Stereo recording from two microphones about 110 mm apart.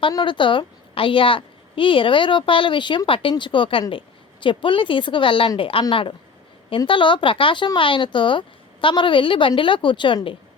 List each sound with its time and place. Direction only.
0.1 s speech: 45° left (ahead or behind)